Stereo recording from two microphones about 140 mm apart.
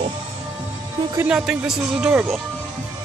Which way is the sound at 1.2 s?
5° right (ahead or behind).